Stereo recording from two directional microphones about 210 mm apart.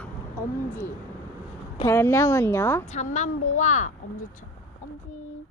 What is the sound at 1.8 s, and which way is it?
A woman's voice, 10° left (ahead or behind).